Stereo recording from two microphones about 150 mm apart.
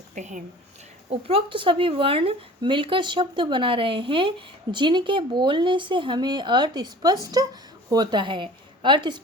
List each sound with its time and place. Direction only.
0.1 s a woman's voice: 55° right (ahead or behind)
1.1 s a woman's voice: 35° right (ahead or behind)